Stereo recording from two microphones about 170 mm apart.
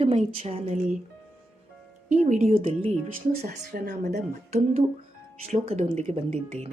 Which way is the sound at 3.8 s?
65° right (ahead or behind).